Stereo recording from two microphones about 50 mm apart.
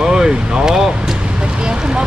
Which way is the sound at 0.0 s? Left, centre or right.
Centre.